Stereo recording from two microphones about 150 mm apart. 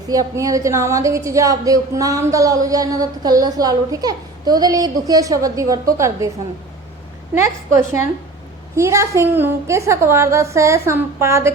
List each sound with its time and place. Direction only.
0.1 s a woman's voice: 25° right (ahead or behind)
8.7 s a woman's voice: 20° right (ahead or behind)